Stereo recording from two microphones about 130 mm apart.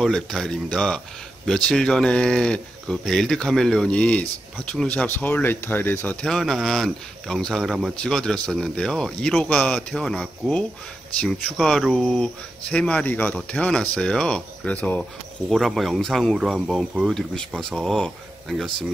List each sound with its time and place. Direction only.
0.0 s speech: 5° left (ahead or behind)
6.2 s speech: 5° left (ahead or behind)